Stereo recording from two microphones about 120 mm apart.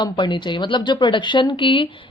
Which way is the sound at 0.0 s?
40° left (ahead or behind).